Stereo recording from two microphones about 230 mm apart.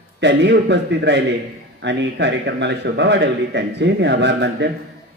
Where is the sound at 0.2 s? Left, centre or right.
Right.